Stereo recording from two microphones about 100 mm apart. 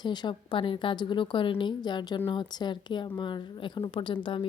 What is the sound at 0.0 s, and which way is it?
A woman's voice, 50° left (ahead or behind).